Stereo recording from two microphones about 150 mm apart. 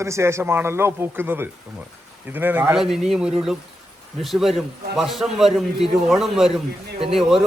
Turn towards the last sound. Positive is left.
turn(degrees=-5)  # may be behind; listen again after turning